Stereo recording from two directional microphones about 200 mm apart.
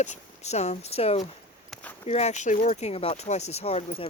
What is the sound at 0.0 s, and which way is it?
Speech, 35° left (ahead or behind).